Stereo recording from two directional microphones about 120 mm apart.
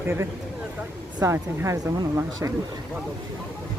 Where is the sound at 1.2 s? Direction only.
25° right (ahead or behind).